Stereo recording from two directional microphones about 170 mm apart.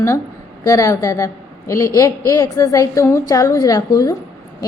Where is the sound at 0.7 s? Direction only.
20° left (ahead or behind).